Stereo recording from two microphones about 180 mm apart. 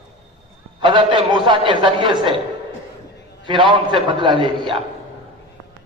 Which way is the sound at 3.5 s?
25° right (ahead or behind).